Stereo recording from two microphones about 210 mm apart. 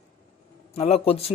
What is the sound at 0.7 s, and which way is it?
Speech, 30° left (ahead or behind).